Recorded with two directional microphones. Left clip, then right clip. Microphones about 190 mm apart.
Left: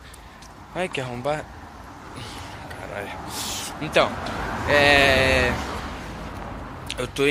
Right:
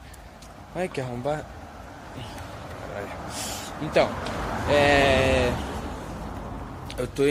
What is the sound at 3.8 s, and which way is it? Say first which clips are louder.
Speech: left 2 dB; 10° right (ahead or behind).